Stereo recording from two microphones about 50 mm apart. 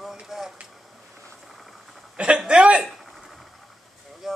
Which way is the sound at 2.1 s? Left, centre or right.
Right.